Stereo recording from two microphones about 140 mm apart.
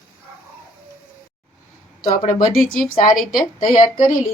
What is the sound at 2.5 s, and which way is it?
Speech, 5° left (ahead or behind).